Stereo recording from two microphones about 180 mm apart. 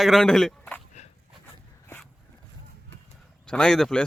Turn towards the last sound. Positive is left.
turn(degrees=0)  # may be behind; listen again after turning